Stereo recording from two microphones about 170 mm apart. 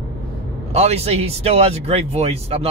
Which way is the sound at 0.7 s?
40° right (ahead or behind).